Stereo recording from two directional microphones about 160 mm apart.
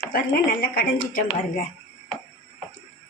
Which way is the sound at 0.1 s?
65° left (ahead or behind).